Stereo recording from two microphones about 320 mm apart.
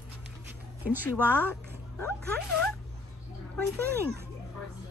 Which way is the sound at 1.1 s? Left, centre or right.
Centre.